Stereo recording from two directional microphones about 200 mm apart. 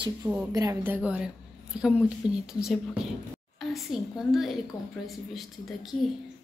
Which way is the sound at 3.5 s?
Centre (ahead or behind).